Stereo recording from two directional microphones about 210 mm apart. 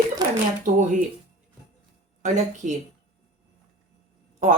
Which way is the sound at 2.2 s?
35° right (ahead or behind).